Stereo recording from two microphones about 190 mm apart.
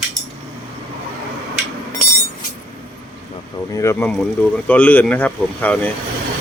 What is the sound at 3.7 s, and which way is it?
Speech, 15° left (ahead or behind).